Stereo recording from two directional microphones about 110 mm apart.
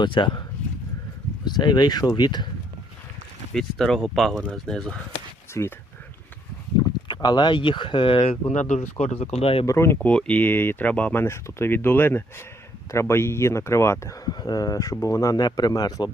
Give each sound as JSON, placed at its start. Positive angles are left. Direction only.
{"t": 0.0, "sound": "speech", "side_deg": 45}
{"t": 1.5, "sound": "speech", "side_deg": 40}
{"t": 3.5, "sound": "speech", "side_deg": 5}
{"t": 5.5, "sound": "speech", "side_deg": 25}
{"t": 6.7, "sound": "speech", "side_deg": 40}
{"t": 9.6, "sound": "speech", "side_deg": 25}
{"t": 10.1, "sound": "speech", "side_deg": 10}